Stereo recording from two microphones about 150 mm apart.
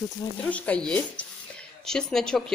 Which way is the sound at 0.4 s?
10° left (ahead or behind).